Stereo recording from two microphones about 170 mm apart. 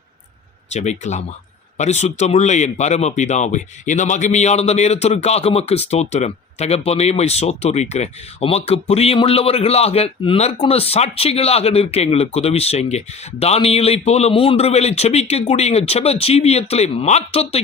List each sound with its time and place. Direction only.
0.7 s speech: 40° left (ahead or behind)